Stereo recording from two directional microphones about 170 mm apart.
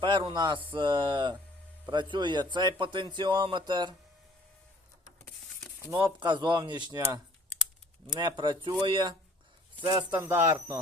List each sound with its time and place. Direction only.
0.0 s speech: 30° right (ahead or behind)
5.8 s speech: 20° right (ahead or behind)
8.0 s speech: 25° right (ahead or behind)
10.2 s speech: 10° right (ahead or behind)